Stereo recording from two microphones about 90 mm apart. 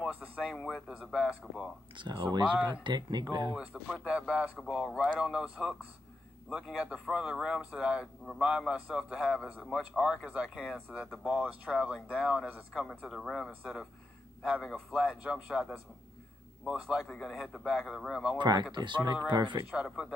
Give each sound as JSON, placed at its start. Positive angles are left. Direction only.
{"t": 0.0, "sound": "a sound", "side_deg": -15}
{"t": 0.4, "sound": "a man's voice", "side_deg": 0}
{"t": 0.8, "sound": "speech", "side_deg": -5}
{"t": 2.0, "sound": "speech", "side_deg": -65}
{"t": 3.8, "sound": "a man's voice", "side_deg": -10}
{"t": 13.2, "sound": "a man's voice", "side_deg": 5}
{"t": 14.6, "sound": "a man's voice", "side_deg": 5}
{"t": 15.0, "sound": "speech", "side_deg": -10}
{"t": 17.1, "sound": "a man's voice", "side_deg": 0}
{"t": 18.4, "sound": "speech", "side_deg": -55}
{"t": 19.7, "sound": "speech", "side_deg": -5}